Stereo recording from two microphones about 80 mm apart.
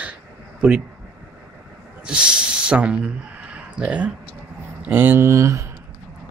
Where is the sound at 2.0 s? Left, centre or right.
Centre.